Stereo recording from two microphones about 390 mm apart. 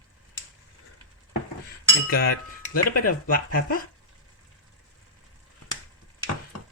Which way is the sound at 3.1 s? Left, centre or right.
Left.